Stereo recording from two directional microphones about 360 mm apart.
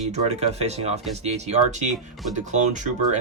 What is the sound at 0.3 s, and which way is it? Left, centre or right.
Speech, centre.